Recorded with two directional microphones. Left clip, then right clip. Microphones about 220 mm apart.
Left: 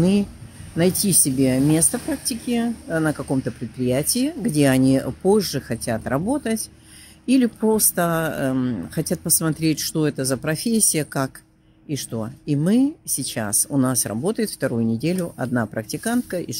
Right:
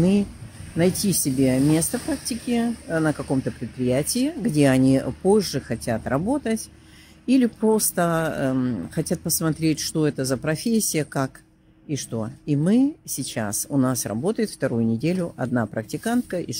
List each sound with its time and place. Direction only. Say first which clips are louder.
0.0 s speech: left 1 dB; 10° left (ahead or behind)